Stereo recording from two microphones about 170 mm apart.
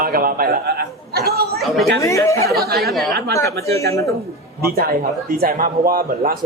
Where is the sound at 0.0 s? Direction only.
55° right (ahead or behind).